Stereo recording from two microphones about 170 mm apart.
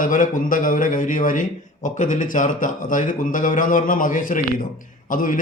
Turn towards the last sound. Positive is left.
turn(degrees=55)  # may be behind; listen again after turning